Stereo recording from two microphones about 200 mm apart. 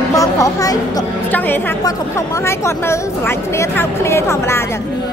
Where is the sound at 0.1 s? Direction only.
15° left (ahead or behind).